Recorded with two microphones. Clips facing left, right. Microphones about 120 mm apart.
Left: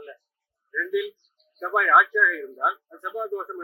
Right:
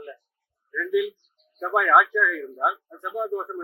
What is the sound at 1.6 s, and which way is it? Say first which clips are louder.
A man's voice: right 1 dB; 15° right (ahead or behind).